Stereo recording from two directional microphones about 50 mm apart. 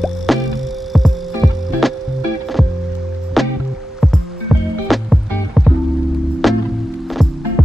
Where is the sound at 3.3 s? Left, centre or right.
Centre.